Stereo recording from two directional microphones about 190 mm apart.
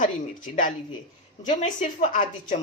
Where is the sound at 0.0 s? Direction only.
45° left (ahead or behind).